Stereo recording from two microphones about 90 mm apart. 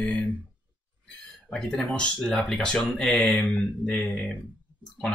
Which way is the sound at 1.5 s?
10° left (ahead or behind).